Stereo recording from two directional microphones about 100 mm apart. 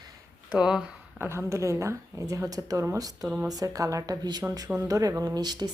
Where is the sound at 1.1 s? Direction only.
20° right (ahead or behind).